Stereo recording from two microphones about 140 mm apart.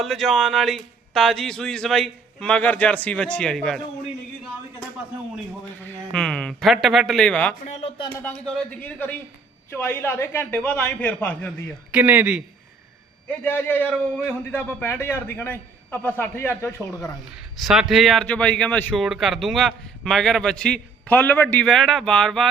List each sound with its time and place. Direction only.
0.0 s speech: centre (ahead or behind)
5.8 s a man's voice: 15° left (ahead or behind)
11.9 s a man's voice: 10° right (ahead or behind)
13.2 s a man's voice: 10° left (ahead or behind)
17.6 s a man's voice: centre (ahead or behind)
19.0 s speech: centre (ahead or behind)